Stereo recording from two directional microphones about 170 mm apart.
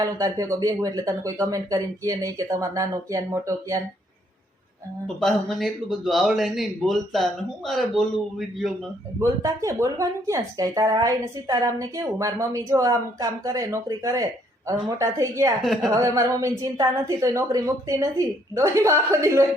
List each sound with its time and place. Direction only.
0.0 s speech: 20° right (ahead or behind)
5.0 s speech: centre (ahead or behind)
9.2 s a woman's voice: 20° right (ahead or behind)
15.6 s speech: centre (ahead or behind)
15.9 s a woman's voice: 20° right (ahead or behind)